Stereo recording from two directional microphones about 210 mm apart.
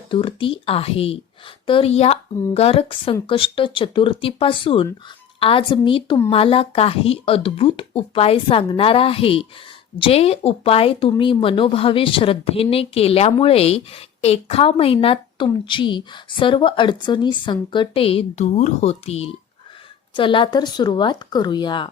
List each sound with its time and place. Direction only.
0.1 s a woman's voice: 25° left (ahead or behind)